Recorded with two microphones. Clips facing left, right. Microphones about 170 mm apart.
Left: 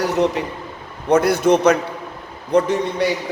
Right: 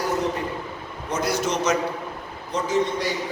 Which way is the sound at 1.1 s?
55° left (ahead or behind).